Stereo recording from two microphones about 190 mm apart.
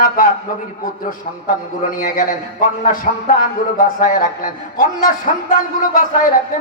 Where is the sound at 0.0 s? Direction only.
45° left (ahead or behind).